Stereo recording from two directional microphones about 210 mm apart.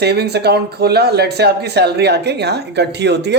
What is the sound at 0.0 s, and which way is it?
Speech, 50° right (ahead or behind).